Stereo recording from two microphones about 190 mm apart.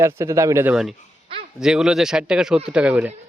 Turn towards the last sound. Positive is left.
turn(degrees=-5)  # may be behind; listen again after turning